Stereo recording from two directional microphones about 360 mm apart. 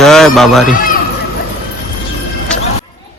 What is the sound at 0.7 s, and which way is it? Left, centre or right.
Run, left.